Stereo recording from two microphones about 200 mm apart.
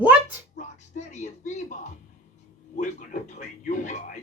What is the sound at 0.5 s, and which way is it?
Music, 35° left (ahead or behind).